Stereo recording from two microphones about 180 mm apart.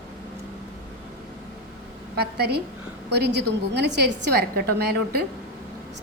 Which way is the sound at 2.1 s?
65° right (ahead or behind).